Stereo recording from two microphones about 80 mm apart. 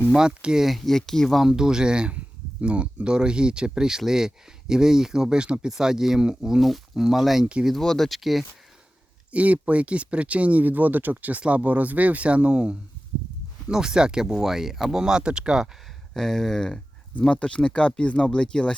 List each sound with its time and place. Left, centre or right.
0.1 s speech: centre
7.4 s speech: centre
7.7 s speech: centre
9.3 s speech: centre
16.1 s speech: centre